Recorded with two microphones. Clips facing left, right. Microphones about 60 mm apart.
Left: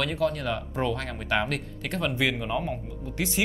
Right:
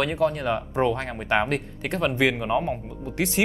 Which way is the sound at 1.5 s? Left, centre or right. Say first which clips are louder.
Right 4 dB; centre.